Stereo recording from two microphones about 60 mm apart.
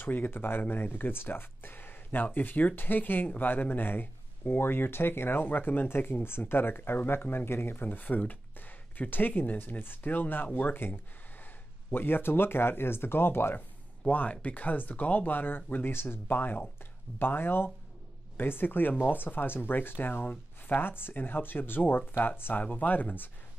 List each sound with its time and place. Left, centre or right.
0.0 s speech: left
14.1 s speech: left